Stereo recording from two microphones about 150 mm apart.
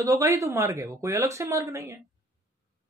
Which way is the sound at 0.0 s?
20° right (ahead or behind).